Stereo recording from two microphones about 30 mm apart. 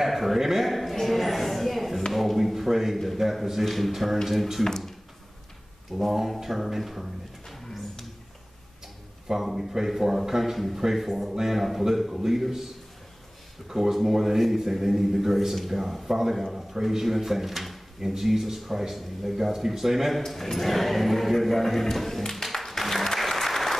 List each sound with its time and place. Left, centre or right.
0.0 s speech: centre
0.7 s a sound: centre
3.2 s speech: centre
4.6 s speech: centre
5.9 s speech: centre
7.4 s a sound: centre
9.4 s speech: centre
13.7 s speech: centre
20.1 s speech: centre
22.3 s music: centre
23.1 s applause: centre